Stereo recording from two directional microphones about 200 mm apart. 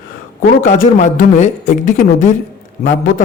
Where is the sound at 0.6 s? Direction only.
40° left (ahead or behind).